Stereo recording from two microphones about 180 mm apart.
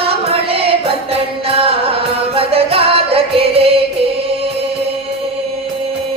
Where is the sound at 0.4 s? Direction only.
30° right (ahead or behind).